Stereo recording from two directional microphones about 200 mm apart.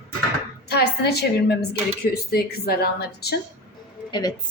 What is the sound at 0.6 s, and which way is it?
A woman's voice, 55° left (ahead or behind).